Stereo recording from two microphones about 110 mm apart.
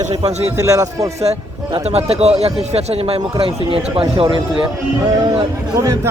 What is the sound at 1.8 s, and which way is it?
Speech, 70° right (ahead or behind).